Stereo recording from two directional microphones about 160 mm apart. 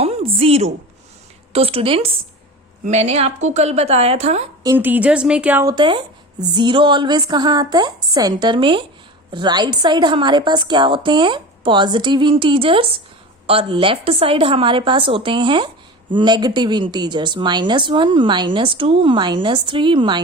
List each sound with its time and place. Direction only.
0.0 s a sound: 40° right (ahead or behind)
1.5 s a woman's voice: 35° right (ahead or behind)
4.6 s speech: 15° right (ahead or behind)
5.6 s a woman's voice: 30° right (ahead or behind)